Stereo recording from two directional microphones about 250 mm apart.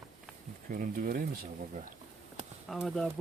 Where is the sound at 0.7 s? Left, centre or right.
Right.